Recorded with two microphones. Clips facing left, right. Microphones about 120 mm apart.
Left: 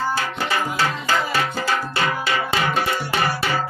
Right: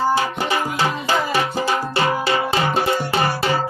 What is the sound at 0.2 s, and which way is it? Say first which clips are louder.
Music: right 3 dB; 20° right (ahead or behind).